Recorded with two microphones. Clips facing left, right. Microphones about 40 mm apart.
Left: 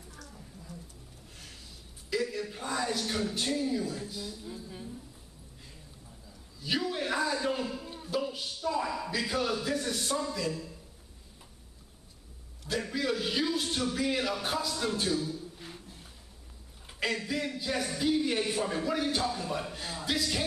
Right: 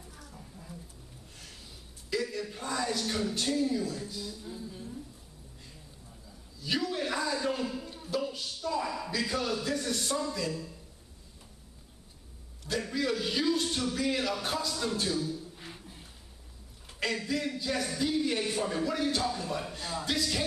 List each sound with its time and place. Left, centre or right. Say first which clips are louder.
0.2 s a sound: left 1 dB; centre
2.0 s a man's voice: left 1 dB; centre
4.6 s a woman's voice: even; centre
6.6 s a man's voice: even; centre
12.6 s a man's voice: even; centre
15.5 s a sound: even; centre
16.8 s a man's voice: even; centre